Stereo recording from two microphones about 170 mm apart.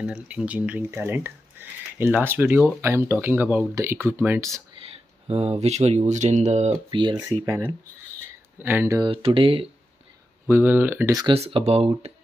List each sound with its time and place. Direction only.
0.0 s speech: 5° right (ahead or behind)
5.3 s speech: 35° right (ahead or behind)
7.4 s speech: 15° right (ahead or behind)
9.1 s speech: 30° right (ahead or behind)
10.5 s speech: 10° right (ahead or behind)
11.3 s speech: 35° right (ahead or behind)